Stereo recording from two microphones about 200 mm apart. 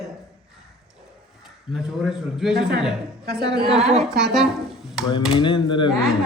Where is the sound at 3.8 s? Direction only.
Centre (ahead or behind).